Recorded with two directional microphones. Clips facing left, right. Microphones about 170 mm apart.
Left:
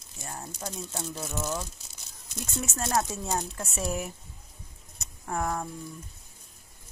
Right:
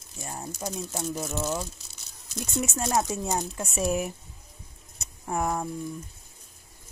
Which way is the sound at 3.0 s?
15° right (ahead or behind).